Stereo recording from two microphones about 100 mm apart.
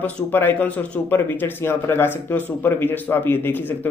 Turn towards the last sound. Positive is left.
turn(degrees=20)  # may be behind; listen again after turning